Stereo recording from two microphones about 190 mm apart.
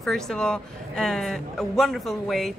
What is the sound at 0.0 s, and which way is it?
A woman's voice, centre (ahead or behind).